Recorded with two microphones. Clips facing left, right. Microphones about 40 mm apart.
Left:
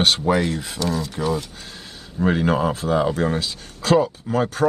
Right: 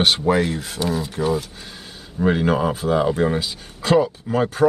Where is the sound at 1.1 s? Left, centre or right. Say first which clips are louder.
Right 2 dB; centre.